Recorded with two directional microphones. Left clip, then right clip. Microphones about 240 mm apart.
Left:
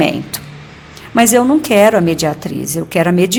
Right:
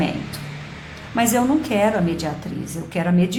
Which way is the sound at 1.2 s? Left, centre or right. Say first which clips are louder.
Left 8 dB; left.